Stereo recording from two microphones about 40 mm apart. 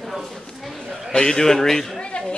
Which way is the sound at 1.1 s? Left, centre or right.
Centre.